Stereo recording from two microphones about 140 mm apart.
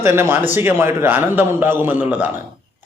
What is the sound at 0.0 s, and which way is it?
A man's voice, 15° right (ahead or behind).